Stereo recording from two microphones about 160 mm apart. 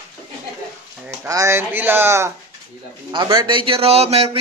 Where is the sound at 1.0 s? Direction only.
15° right (ahead or behind).